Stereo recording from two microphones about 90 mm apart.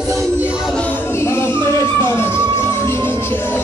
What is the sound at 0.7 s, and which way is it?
Music, 20° left (ahead or behind).